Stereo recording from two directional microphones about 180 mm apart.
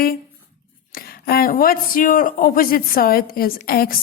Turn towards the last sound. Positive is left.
turn(degrees=55)  # may be behind; listen again after turning